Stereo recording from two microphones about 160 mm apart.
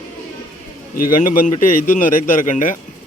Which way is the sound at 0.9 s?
60° left (ahead or behind).